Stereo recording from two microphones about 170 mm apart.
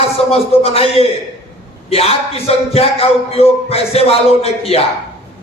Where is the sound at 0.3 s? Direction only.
35° left (ahead or behind).